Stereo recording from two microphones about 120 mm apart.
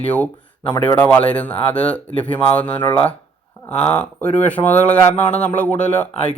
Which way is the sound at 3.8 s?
10° left (ahead or behind).